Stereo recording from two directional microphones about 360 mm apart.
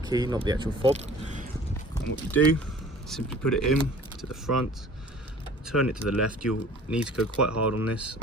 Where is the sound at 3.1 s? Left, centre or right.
Centre.